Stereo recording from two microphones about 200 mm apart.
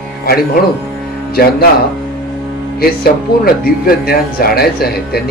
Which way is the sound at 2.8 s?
50° left (ahead or behind).